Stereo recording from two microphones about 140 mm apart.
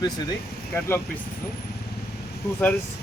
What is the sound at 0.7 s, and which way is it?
Speech, 15° left (ahead or behind).